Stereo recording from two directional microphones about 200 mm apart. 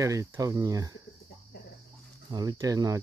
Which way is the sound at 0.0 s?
15° right (ahead or behind).